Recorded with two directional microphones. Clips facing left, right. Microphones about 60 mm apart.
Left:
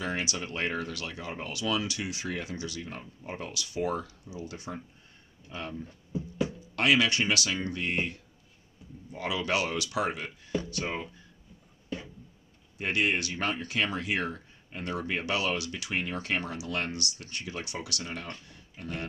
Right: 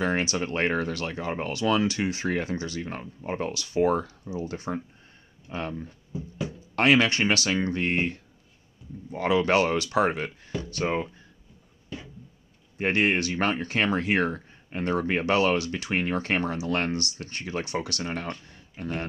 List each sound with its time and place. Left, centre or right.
0.0 s speech: right
12.7 s speech: right